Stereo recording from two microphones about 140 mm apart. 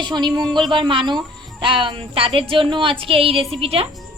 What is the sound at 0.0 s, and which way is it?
A woman's voice, 30° right (ahead or behind).